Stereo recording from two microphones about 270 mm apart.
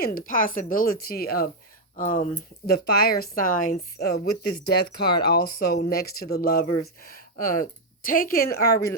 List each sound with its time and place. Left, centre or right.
0.0 s a woman's voice: left